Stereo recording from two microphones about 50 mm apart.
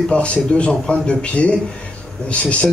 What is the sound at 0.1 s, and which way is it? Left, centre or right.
Speech, left.